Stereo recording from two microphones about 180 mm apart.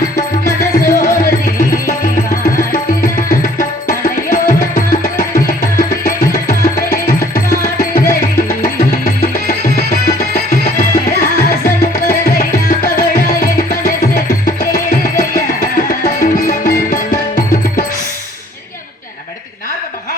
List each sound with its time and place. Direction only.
0.9 s music: 50° left (ahead or behind)